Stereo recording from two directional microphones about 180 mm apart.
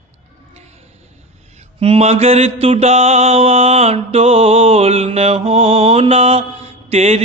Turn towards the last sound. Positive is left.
turn(degrees=-35)  # may be behind; listen again after turning